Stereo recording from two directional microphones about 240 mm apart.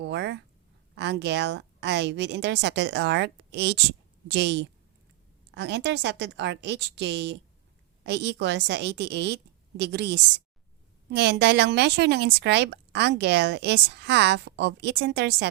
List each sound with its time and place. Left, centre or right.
0.0 s speech: right